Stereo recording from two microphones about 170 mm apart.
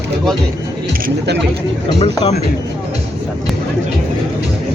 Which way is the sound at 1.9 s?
35° left (ahead or behind).